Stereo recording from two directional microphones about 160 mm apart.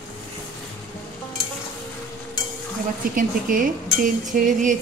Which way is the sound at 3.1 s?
60° right (ahead or behind).